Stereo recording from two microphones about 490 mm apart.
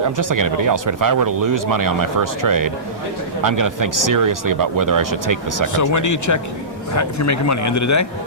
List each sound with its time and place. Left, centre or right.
0.2 s speech: right
5.6 s speech: left